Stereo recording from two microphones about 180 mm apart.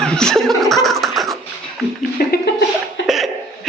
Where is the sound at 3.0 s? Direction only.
Centre (ahead or behind).